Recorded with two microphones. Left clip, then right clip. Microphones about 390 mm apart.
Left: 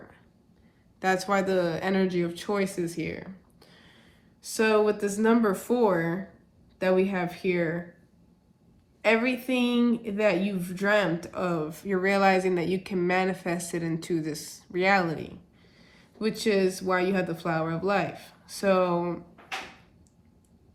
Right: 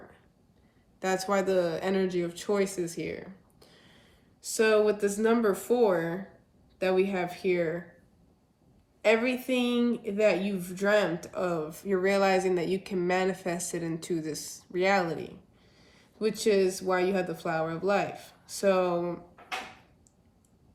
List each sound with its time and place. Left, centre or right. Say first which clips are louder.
0.9 s speech: left 3 dB; centre
9.0 s a woman's voice: left 1 dB; centre